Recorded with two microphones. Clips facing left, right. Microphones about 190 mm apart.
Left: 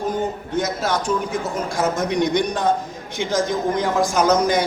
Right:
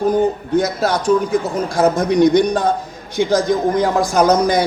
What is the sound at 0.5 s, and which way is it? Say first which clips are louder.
A man's voice: right 2 dB; 35° right (ahead or behind).